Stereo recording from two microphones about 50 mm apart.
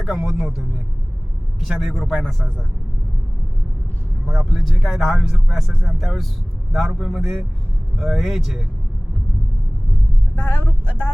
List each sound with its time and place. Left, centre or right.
0.1 s speech: centre
1.6 s speech: centre
4.3 s speech: centre
10.3 s speech: left